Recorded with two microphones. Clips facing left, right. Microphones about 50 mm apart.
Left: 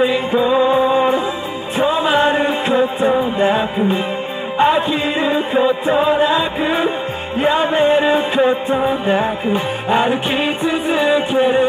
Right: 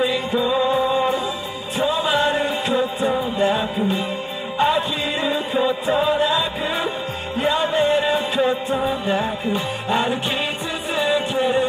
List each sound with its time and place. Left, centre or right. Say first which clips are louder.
0.0 s music: left 5 dB; left
4.6 s music: left 5 dB; left